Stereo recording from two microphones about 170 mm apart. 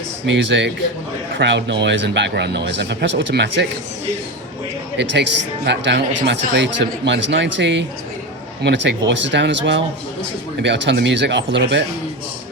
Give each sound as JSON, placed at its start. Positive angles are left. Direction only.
{"t": 0.3, "sound": "speech", "side_deg": -90}
{"t": 4.9, "sound": "speech", "side_deg": -85}